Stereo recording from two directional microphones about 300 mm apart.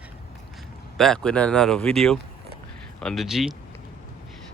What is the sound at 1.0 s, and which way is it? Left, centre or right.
Speech, centre.